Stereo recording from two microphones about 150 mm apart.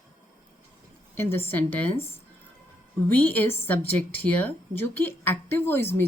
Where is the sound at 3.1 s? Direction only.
10° left (ahead or behind).